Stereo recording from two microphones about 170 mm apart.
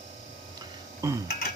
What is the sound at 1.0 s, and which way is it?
Speech, 20° right (ahead or behind).